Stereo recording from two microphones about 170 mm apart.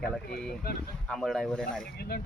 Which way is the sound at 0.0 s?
5° left (ahead or behind).